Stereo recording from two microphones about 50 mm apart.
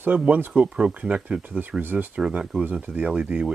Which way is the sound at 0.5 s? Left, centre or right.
Right.